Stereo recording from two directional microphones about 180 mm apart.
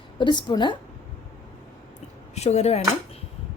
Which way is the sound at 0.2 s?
25° left (ahead or behind).